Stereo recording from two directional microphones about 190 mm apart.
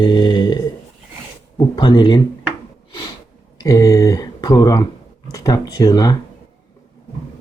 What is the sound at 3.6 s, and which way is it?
Speech, 15° left (ahead or behind).